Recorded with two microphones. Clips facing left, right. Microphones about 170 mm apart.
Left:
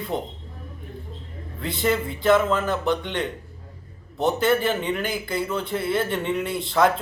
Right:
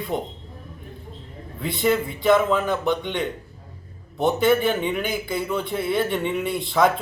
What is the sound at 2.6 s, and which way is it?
Speech, 15° right (ahead or behind).